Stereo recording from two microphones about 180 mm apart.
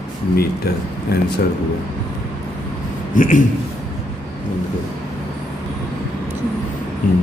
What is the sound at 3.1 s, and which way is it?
Speech, 45° left (ahead or behind).